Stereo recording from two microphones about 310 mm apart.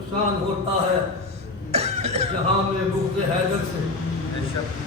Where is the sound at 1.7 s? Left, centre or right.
Centre.